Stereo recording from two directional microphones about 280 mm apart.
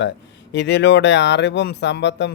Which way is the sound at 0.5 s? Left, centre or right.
Left.